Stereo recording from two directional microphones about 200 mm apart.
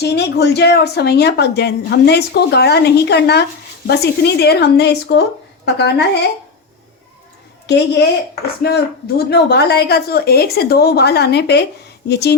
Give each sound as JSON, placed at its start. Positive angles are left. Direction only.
{"t": 0.0, "sound": "a woman's voice", "side_deg": 55}
{"t": 8.6, "sound": "a woman's voice", "side_deg": 55}